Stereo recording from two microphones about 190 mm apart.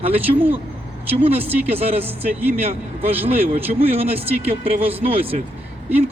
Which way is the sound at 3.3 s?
30° right (ahead or behind).